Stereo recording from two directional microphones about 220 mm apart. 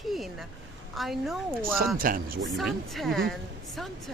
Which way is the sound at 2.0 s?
40° right (ahead or behind).